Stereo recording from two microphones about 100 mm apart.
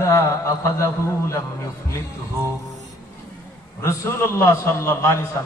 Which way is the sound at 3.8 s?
25° left (ahead or behind).